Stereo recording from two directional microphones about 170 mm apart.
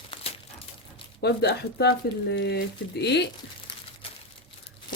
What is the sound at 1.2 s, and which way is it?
Speech, 75° left (ahead or behind).